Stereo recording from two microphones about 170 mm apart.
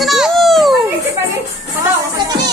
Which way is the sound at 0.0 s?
Centre (ahead or behind).